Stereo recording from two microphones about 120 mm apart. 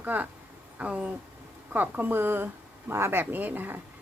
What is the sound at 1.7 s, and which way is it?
A woman's voice, 15° right (ahead or behind).